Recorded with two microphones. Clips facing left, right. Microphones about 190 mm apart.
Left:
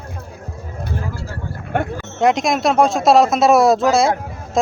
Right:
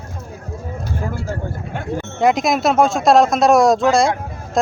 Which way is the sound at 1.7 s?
60° left (ahead or behind).